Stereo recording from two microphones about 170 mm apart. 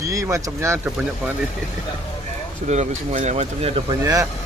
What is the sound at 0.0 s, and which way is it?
Speech, 20° right (ahead or behind).